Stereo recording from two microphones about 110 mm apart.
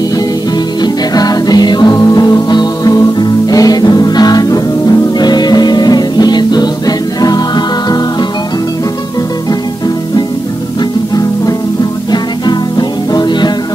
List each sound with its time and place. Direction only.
0.8 s music: 35° left (ahead or behind)
12.1 s music: 40° left (ahead or behind)